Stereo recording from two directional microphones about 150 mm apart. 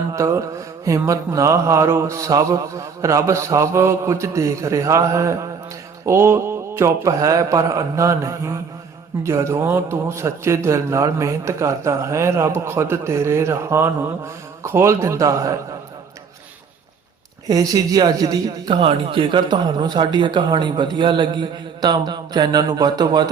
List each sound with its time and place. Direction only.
0.1 s mantra: 20° right (ahead or behind)
0.9 s a man's voice: 20° right (ahead or behind)
17.5 s a man's voice: 25° right (ahead or behind)